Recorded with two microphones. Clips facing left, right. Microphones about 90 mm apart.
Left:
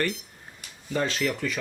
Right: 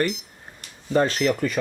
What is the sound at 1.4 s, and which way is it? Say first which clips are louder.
Speech: right 5 dB; 40° right (ahead or behind).